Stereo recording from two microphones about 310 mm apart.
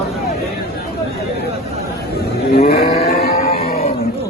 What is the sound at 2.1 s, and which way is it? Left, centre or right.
Livestock, left.